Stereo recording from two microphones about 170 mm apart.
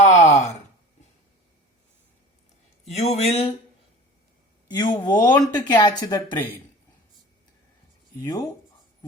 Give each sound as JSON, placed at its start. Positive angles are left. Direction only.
{"t": 0.0, "sound": "a sound", "side_deg": 40}
{"t": 2.8, "sound": "speech", "side_deg": 40}
{"t": 4.7, "sound": "speech", "side_deg": 25}
{"t": 8.2, "sound": "speech", "side_deg": 25}